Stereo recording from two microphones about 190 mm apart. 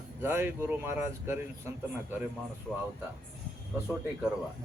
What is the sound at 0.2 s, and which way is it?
Speech, 10° right (ahead or behind).